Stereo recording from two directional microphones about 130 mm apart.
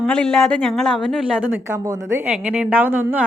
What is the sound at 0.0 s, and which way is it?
Speech, 5° left (ahead or behind).